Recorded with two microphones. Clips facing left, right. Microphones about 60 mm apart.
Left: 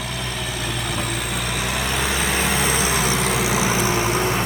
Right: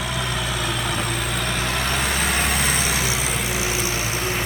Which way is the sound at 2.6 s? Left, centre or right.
Left.